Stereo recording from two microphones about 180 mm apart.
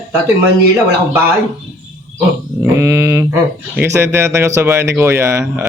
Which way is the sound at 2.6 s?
15° right (ahead or behind).